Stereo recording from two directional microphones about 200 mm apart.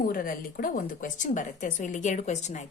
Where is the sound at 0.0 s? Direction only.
45° left (ahead or behind).